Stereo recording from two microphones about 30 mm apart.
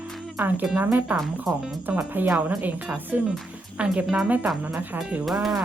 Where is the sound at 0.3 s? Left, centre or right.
Right.